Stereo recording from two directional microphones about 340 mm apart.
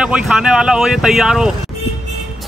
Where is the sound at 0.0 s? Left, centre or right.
Centre.